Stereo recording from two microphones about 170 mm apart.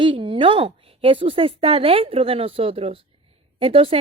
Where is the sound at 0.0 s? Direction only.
30° right (ahead or behind).